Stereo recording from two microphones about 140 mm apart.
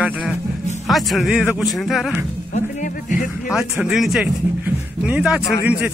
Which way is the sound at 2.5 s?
70° left (ahead or behind).